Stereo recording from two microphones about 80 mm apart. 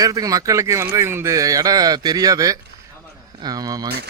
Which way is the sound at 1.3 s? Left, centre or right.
Right.